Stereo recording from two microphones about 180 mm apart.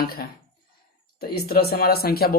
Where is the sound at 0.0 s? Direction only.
60° left (ahead or behind).